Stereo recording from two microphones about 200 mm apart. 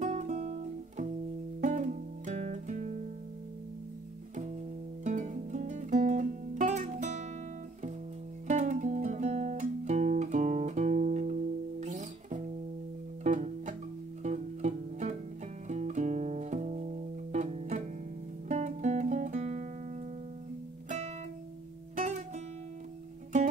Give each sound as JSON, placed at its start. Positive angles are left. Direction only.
{"t": 0.0, "sound": "music", "side_deg": -35}
{"t": 5.0, "sound": "guitar", "side_deg": -35}
{"t": 8.5, "sound": "music", "side_deg": -35}
{"t": 18.5, "sound": "guitar", "side_deg": -35}
{"t": 21.9, "sound": "music", "side_deg": -35}